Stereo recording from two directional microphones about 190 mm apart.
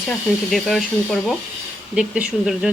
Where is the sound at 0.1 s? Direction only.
5° left (ahead or behind).